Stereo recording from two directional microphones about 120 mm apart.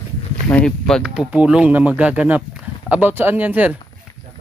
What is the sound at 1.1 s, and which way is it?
Speech, 10° right (ahead or behind).